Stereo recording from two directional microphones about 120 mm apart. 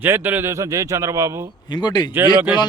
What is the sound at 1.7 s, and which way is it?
Speech, 35° left (ahead or behind).